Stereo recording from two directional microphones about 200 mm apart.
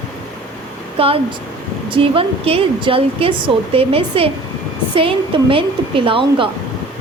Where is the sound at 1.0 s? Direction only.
30° right (ahead or behind).